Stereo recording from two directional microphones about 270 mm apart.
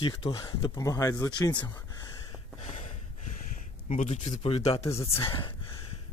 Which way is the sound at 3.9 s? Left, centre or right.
Left.